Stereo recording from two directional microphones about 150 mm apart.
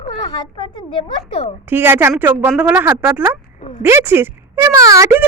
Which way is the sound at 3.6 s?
40° left (ahead or behind).